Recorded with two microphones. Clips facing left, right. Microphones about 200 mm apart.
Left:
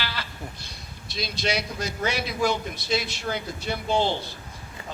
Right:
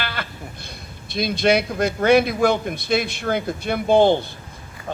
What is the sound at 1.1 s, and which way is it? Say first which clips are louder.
Speech: right 10 dB; 55° right (ahead or behind).